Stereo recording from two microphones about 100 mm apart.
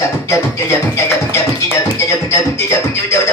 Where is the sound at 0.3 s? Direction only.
25° left (ahead or behind).